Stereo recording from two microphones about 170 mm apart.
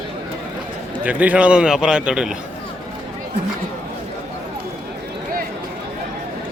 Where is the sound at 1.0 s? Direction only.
10° right (ahead or behind).